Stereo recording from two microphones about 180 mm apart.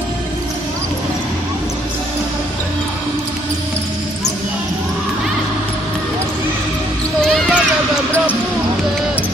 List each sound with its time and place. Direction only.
7.2 s basketball bounce: centre (ahead or behind)